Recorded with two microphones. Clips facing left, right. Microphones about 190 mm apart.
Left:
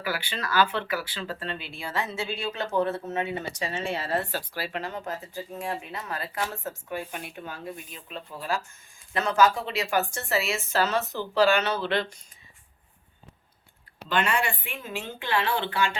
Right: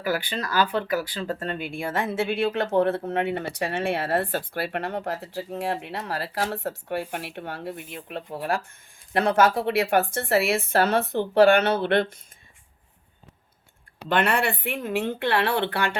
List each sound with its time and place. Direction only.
0.0 s speech: 40° right (ahead or behind); by 12.1 s 60° right (ahead or behind)
14.1 s speech: 60° right (ahead or behind)